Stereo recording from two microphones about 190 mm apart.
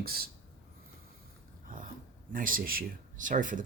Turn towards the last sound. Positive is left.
turn(degrees=-45)  # may be behind; listen again after turning